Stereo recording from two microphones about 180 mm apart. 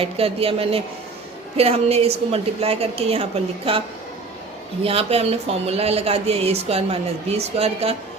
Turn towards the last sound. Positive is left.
turn(degrees=-35)  # may be behind; listen again after turning